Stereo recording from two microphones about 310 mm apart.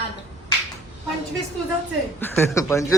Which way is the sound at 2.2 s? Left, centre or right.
Centre.